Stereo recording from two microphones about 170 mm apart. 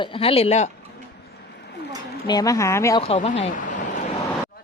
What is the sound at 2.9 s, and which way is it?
Speech, 35° left (ahead or behind).